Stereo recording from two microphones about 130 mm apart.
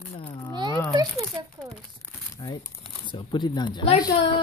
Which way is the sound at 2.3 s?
30° left (ahead or behind).